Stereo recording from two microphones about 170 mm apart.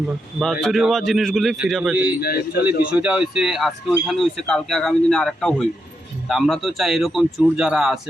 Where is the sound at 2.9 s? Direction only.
5° right (ahead or behind).